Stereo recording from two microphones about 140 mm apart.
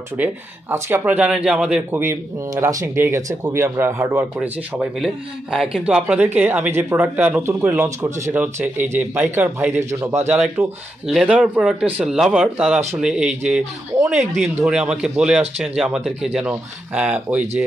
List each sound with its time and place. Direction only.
0.2 s speech: 15° right (ahead or behind)
11.1 s speech: 5° right (ahead or behind)